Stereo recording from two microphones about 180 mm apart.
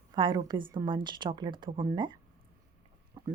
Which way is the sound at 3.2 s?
25° right (ahead or behind).